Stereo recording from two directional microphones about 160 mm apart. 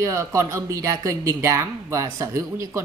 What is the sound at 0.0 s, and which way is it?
Speech, 20° right (ahead or behind).